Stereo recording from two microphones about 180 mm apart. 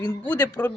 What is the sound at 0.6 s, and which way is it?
Speech, 10° left (ahead or behind).